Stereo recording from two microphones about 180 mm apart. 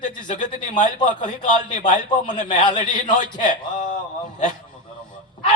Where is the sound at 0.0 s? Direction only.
45° left (ahead or behind).